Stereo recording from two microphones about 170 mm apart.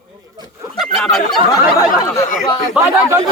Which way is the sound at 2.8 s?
5° right (ahead or behind).